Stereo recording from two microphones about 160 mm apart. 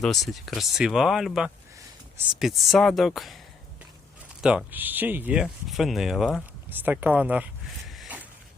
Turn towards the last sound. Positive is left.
turn(degrees=-10)  # may be behind; listen again after turning